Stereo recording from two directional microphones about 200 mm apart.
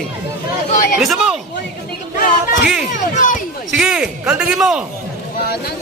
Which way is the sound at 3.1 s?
40° left (ahead or behind).